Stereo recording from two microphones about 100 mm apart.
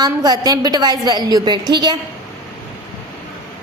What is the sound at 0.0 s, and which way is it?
A woman's voice, 40° right (ahead or behind).